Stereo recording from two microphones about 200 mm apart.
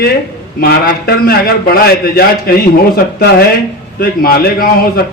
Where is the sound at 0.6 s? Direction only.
50° left (ahead or behind).